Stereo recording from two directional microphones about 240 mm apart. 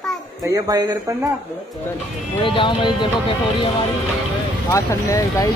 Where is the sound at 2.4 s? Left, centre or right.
Left.